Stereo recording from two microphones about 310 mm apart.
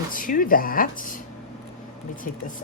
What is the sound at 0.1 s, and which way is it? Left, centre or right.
A woman's voice, left.